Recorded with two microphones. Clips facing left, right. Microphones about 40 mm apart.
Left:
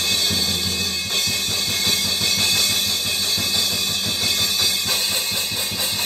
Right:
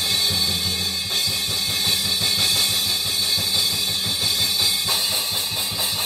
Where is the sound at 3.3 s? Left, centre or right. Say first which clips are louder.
Left 1 dB; left.